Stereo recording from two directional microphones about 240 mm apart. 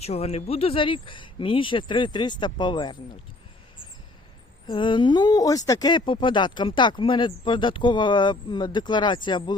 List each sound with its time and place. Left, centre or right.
0.0 s speech: left
4.6 s speech: centre